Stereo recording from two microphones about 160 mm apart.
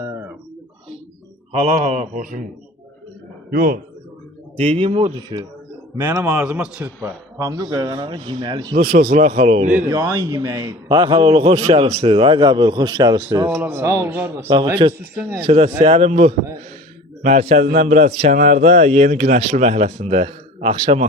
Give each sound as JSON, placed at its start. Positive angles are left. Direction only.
{"t": 0.0, "sound": "a sound", "side_deg": -15}
{"t": 1.5, "sound": "a man's voice", "side_deg": -45}
{"t": 3.5, "sound": "a man's voice", "side_deg": -60}
{"t": 4.5, "sound": "a man's voice", "side_deg": -35}
{"t": 5.1, "sound": "speech", "side_deg": -25}
{"t": 6.2, "sound": "speech", "side_deg": -5}
{"t": 7.0, "sound": "speech", "side_deg": -20}
{"t": 8.7, "sound": "a man's voice", "side_deg": -65}
{"t": 9.9, "sound": "speech", "side_deg": -20}
{"t": 11.1, "sound": "a man's voice", "side_deg": -35}
{"t": 13.5, "sound": "speech", "side_deg": -10}
{"t": 15.4, "sound": "a man's voice", "side_deg": -35}